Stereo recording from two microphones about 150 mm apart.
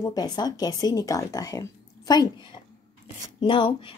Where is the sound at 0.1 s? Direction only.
25° left (ahead or behind).